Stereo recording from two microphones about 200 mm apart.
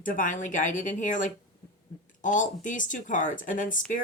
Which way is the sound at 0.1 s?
40° left (ahead or behind).